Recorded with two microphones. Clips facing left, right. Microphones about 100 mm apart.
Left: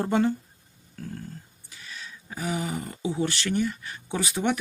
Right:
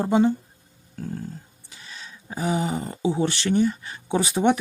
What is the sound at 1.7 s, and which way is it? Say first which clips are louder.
Speech: even; 25° right (ahead or behind).